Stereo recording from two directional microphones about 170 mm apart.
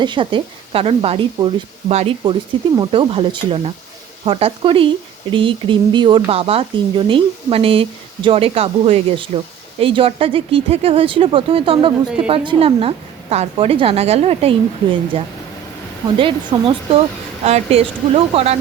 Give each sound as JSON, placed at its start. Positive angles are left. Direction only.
{"t": 0.0, "sound": "speech", "side_deg": -30}